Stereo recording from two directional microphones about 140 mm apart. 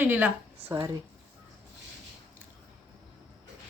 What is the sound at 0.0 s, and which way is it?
Speech, 15° right (ahead or behind).